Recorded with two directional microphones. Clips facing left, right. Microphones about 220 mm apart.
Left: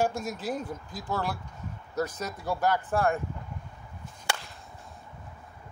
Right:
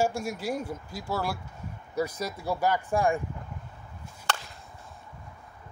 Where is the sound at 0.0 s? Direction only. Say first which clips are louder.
Right 1 dB; 10° right (ahead or behind).